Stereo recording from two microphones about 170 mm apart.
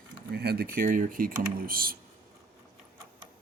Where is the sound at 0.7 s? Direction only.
55° right (ahead or behind).